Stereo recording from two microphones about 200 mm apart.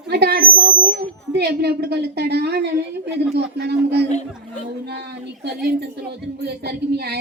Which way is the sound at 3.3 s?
55° right (ahead or behind).